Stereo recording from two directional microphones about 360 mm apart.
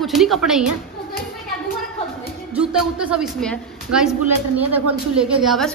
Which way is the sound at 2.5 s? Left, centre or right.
Centre.